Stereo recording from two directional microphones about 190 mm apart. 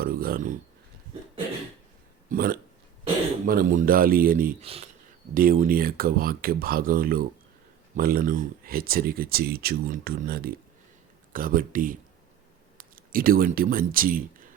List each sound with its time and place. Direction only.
0.0 s speech: 50° right (ahead or behind)
2.3 s speech: 50° right (ahead or behind)
4.6 s speech: 30° right (ahead or behind)
5.3 s speech: 50° right (ahead or behind)